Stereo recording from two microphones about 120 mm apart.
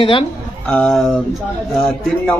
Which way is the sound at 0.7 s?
15° left (ahead or behind).